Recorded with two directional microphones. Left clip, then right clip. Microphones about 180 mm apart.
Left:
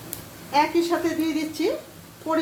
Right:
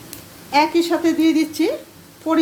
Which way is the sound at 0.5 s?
60° right (ahead or behind).